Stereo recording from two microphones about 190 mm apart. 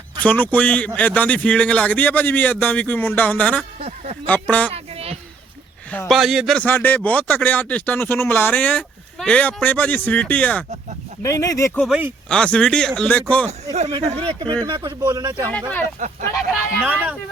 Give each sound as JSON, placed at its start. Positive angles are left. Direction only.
{"t": 0.2, "sound": "a man's voice", "side_deg": 10}
{"t": 3.8, "sound": "a sound", "side_deg": -35}
{"t": 4.3, "sound": "a man's voice", "side_deg": 5}
{"t": 4.7, "sound": "a sound", "side_deg": -30}
{"t": 5.9, "sound": "a man's voice", "side_deg": 5}
{"t": 11.8, "sound": "speech", "side_deg": -5}
{"t": 12.3, "sound": "speech", "side_deg": 5}
{"t": 13.7, "sound": "speech", "side_deg": -35}
{"t": 16.0, "sound": "speech", "side_deg": -45}
{"t": 16.5, "sound": "speech", "side_deg": -5}